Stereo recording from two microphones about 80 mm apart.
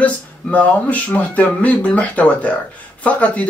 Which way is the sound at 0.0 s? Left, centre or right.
Centre.